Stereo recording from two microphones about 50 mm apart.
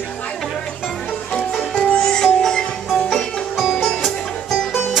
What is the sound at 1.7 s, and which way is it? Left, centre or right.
Music, left.